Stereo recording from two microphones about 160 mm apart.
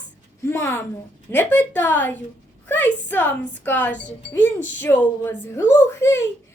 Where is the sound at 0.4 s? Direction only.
15° left (ahead or behind).